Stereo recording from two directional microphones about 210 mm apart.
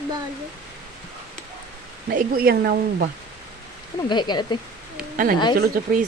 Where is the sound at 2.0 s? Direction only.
45° right (ahead or behind).